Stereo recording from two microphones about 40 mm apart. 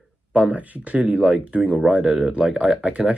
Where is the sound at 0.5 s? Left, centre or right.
Right.